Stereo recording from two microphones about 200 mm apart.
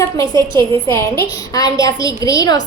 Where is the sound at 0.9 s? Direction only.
15° left (ahead or behind).